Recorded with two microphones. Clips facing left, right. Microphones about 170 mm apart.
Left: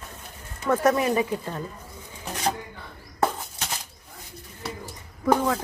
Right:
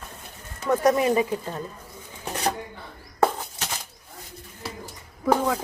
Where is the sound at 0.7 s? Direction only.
20° right (ahead or behind).